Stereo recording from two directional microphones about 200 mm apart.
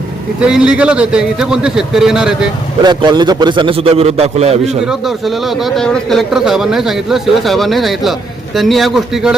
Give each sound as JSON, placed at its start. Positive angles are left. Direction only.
{"t": 0.3, "sound": "a man's voice", "side_deg": -5}
{"t": 2.8, "sound": "a man's voice", "side_deg": -20}
{"t": 4.9, "sound": "a man's voice", "side_deg": 0}